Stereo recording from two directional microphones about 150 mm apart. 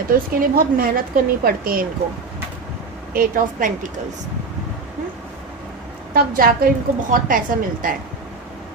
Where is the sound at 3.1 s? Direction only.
70° right (ahead or behind).